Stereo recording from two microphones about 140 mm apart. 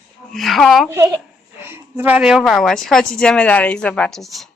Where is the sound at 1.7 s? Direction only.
15° right (ahead or behind).